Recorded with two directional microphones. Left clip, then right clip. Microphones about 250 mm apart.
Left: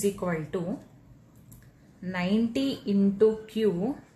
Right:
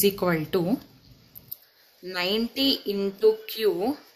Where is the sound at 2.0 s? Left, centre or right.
Right.